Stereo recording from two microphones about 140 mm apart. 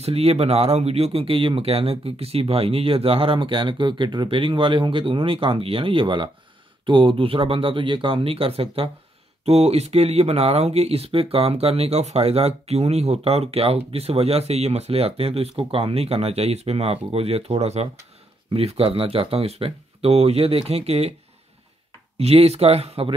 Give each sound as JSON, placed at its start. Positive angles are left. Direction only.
{"t": 0.0, "sound": "speech", "side_deg": -45}
{"t": 22.2, "sound": "speech", "side_deg": -50}